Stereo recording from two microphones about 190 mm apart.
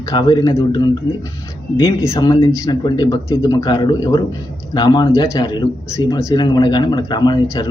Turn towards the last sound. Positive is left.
turn(degrees=20)  # may be behind; listen again after turning